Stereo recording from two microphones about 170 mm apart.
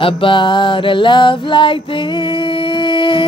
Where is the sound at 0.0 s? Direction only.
30° left (ahead or behind).